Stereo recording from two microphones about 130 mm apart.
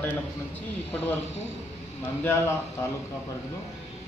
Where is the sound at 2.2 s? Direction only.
20° left (ahead or behind).